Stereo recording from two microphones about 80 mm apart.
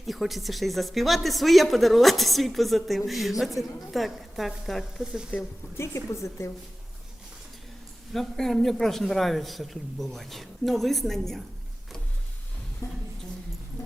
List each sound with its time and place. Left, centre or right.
0.0 s a man's voice: centre
5.7 s a woman's voice: left
8.1 s a man's voice: centre
12.8 s a sound: left